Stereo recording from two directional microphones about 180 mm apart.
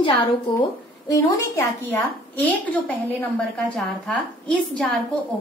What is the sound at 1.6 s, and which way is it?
A woman's voice, 10° left (ahead or behind).